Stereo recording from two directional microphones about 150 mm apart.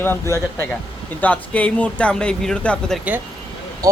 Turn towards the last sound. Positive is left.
turn(degrees=-25)  # may be behind; listen again after turning